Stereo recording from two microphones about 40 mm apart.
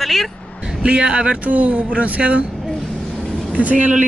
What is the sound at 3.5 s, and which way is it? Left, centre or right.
Speech, right.